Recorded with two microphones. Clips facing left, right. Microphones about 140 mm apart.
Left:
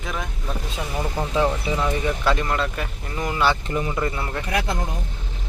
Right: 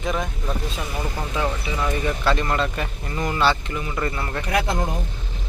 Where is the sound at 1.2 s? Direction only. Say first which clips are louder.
Left 5 dB; 30° left (ahead or behind).